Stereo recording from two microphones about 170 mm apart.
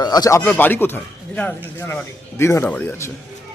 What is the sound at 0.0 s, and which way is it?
Speech, 25° left (ahead or behind).